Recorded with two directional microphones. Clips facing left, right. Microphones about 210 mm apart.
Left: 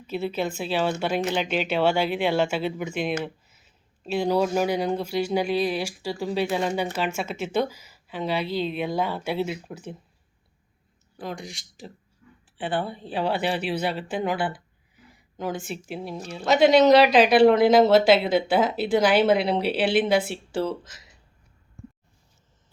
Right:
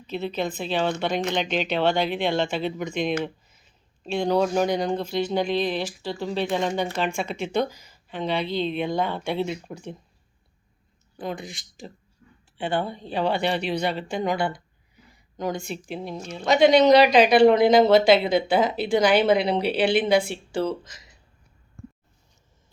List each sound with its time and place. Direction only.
0.1 s speech: 10° left (ahead or behind)
11.2 s speech: centre (ahead or behind)
12.2 s a sound: 35° right (ahead or behind)
12.5 s a woman's voice: 5° left (ahead or behind)